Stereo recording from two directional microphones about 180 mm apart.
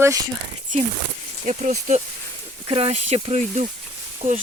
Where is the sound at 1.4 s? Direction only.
40° right (ahead or behind).